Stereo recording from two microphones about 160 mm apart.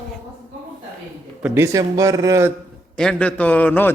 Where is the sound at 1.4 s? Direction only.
10° right (ahead or behind).